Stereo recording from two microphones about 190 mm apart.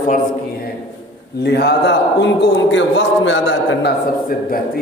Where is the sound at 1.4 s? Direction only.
60° left (ahead or behind); by 3.9 s 85° left.